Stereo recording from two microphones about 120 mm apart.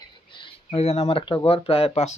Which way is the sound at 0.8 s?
60° left (ahead or behind).